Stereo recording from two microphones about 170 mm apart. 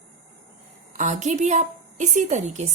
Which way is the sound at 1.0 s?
45° right (ahead or behind).